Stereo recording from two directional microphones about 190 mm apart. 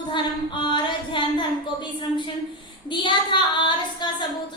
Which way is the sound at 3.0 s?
25° left (ahead or behind).